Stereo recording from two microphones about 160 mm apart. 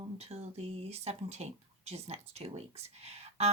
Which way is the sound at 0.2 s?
40° right (ahead or behind).